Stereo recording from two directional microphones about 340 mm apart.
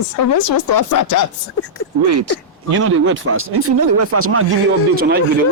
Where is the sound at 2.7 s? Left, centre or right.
Right.